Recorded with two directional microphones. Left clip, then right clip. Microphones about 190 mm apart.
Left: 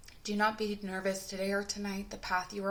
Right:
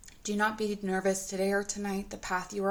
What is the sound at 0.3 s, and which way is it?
A woman's voice, 35° right (ahead or behind).